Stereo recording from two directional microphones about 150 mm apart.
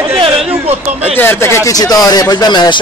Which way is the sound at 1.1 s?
15° left (ahead or behind).